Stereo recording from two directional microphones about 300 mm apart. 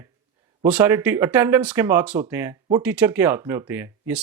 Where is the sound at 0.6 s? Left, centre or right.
Centre.